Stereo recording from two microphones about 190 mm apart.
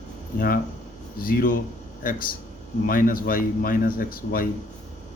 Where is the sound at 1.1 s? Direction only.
50° left (ahead or behind).